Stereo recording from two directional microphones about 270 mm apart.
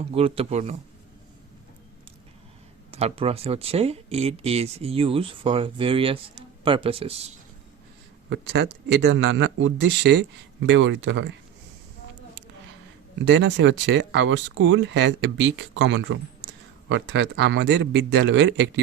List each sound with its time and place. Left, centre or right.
0.1 s speech: right
2.9 s speech: right
8.3 s speech: right
13.2 s speech: right